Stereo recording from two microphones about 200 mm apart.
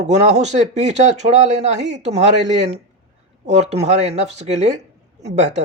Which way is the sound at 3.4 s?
35° right (ahead or behind).